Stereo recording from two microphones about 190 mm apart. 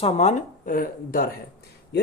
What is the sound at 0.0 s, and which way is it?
Speech, 35° left (ahead or behind).